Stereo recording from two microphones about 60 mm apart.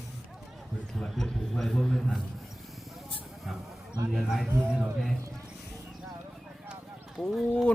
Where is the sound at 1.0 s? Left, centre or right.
Centre.